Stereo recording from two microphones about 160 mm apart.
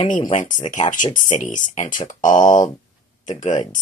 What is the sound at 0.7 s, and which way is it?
Speech, 55° left (ahead or behind).